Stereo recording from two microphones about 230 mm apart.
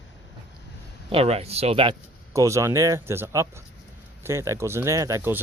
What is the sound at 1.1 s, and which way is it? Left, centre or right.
Speech, right.